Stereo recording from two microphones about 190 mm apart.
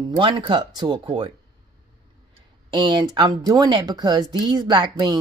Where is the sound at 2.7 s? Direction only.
25° right (ahead or behind).